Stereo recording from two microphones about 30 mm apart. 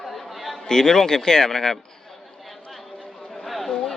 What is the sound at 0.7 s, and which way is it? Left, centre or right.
Speech, centre.